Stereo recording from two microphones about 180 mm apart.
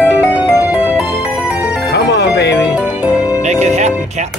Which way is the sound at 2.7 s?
5° right (ahead or behind).